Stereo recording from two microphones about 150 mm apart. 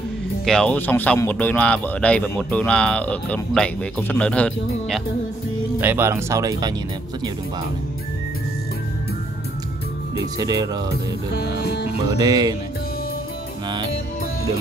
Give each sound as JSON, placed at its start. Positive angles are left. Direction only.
{"t": 0.5, "sound": "speech", "side_deg": 5}
{"t": 5.8, "sound": "speech", "side_deg": -15}
{"t": 10.4, "sound": "speech", "side_deg": -25}
{"t": 12.1, "sound": "speech", "side_deg": -25}